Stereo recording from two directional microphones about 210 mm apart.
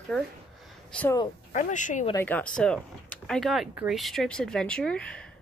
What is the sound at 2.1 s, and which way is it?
Speech, 10° left (ahead or behind).